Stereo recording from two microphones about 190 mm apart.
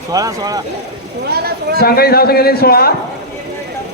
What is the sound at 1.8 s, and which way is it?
A man's voice, 55° left (ahead or behind).